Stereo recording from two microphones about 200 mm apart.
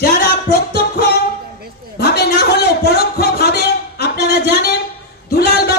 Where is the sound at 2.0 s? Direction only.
55° left (ahead or behind).